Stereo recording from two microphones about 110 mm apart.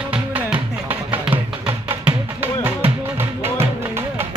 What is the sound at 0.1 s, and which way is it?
Music, 15° right (ahead or behind).